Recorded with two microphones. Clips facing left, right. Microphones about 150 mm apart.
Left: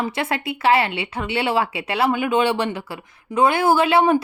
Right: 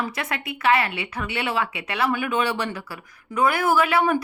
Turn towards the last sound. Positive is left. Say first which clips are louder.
# left 4 dB
turn(degrees=25)  # may be behind; listen again after turning